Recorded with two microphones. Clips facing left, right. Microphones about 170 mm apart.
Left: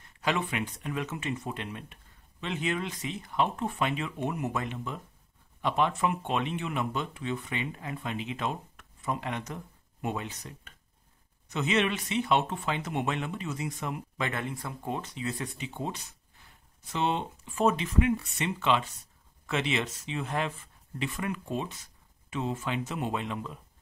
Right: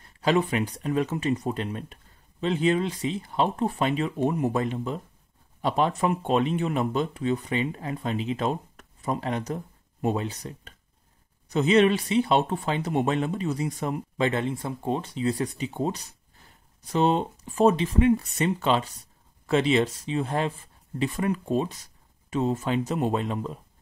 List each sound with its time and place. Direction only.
0.2 s speech: 35° right (ahead or behind)